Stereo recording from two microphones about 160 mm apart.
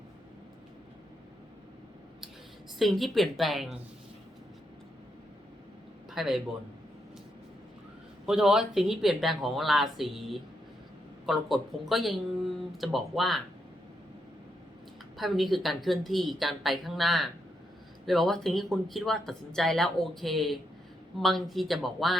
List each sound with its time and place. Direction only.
2.7 s speech: centre (ahead or behind)
6.1 s a man's voice: centre (ahead or behind)
8.3 s speech: 5° right (ahead or behind)
15.2 s speech: centre (ahead or behind)